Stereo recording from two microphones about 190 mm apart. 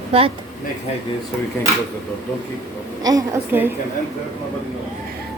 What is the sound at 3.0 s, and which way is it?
Speech, 20° right (ahead or behind).